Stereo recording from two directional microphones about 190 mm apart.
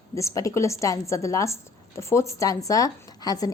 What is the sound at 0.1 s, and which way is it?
A woman's voice, 15° left (ahead or behind).